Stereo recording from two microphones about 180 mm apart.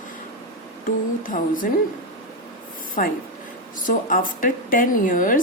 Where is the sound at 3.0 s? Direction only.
50° left (ahead or behind).